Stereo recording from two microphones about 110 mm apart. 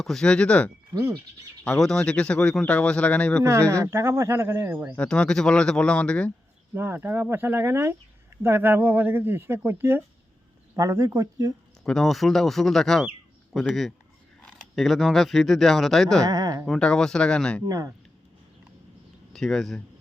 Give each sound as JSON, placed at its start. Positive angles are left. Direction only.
{"t": 0.0, "sound": "speech", "side_deg": 5}
{"t": 3.4, "sound": "speech", "side_deg": -25}
{"t": 4.9, "sound": "speech", "side_deg": 10}
{"t": 6.7, "sound": "speech", "side_deg": -20}
{"t": 11.8, "sound": "speech", "side_deg": 5}
{"t": 16.2, "sound": "a sound", "side_deg": -35}
{"t": 16.6, "sound": "speech", "side_deg": 5}
{"t": 17.7, "sound": "speech", "side_deg": -30}
{"t": 19.3, "sound": "speech", "side_deg": 5}